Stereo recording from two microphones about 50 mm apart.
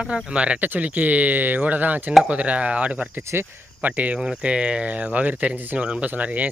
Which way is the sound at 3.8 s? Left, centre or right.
Right.